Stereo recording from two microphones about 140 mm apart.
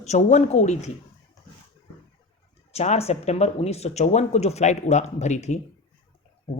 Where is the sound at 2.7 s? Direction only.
50° left (ahead or behind).